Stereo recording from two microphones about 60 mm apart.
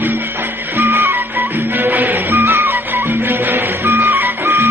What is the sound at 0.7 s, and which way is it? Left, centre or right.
Music, right.